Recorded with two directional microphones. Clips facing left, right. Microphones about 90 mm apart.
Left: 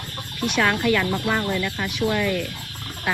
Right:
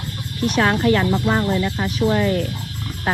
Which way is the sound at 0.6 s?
30° right (ahead or behind).